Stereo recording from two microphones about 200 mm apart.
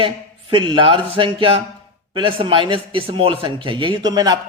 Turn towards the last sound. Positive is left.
turn(degrees=-20)  # may be behind; listen again after turning